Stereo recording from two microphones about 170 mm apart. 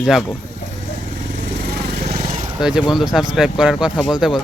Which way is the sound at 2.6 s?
5° right (ahead or behind).